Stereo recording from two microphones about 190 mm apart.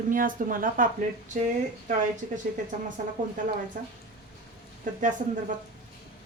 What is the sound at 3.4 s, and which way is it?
Speech, 45° right (ahead or behind).